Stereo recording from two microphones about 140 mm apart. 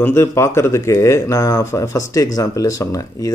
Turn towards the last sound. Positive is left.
turn(degrees=25)  # may be behind; listen again after turning